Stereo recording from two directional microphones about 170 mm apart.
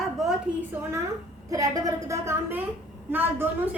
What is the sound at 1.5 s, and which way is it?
A woman's voice, 20° right (ahead or behind).